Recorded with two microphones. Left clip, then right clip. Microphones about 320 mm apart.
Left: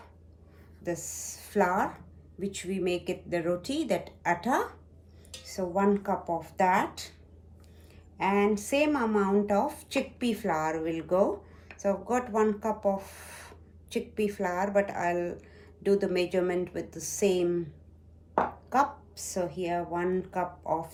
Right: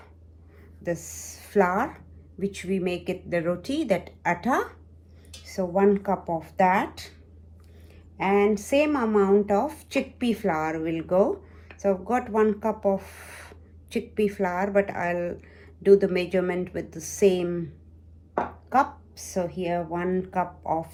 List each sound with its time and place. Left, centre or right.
0.8 s speech: centre
8.2 s speech: centre
18.7 s speech: centre